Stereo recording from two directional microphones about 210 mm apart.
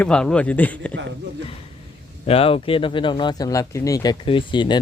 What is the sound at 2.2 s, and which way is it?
Speech, 25° left (ahead or behind).